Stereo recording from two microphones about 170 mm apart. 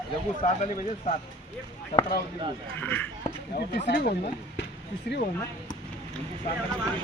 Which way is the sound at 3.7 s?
70° left (ahead or behind).